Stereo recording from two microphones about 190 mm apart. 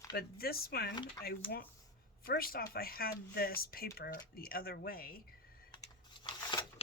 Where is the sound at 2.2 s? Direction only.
50° left (ahead or behind).